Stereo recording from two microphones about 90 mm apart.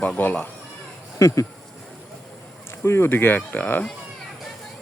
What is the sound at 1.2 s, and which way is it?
Speech, 40° left (ahead or behind).